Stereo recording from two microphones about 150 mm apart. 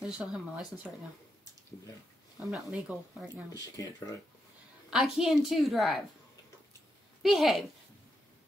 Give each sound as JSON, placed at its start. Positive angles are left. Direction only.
{"t": 0.0, "sound": "a woman's voice", "side_deg": 0}
{"t": 2.4, "sound": "a woman's voice", "side_deg": 0}
{"t": 3.5, "sound": "speech", "side_deg": 25}
{"t": 4.9, "sound": "a woman's voice", "side_deg": 0}
{"t": 7.2, "sound": "a woman's voice", "side_deg": 0}